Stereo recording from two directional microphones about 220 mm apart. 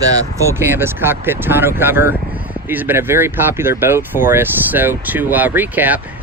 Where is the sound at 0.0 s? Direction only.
15° right (ahead or behind).